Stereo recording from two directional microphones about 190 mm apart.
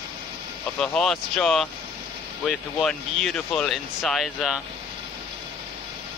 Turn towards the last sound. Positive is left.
turn(degrees=0)  # may be behind; listen again after turning